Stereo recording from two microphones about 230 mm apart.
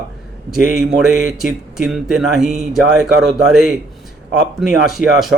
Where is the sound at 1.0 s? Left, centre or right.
Centre.